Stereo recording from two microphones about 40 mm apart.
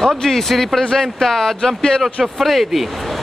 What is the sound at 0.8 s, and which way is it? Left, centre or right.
Speech, centre.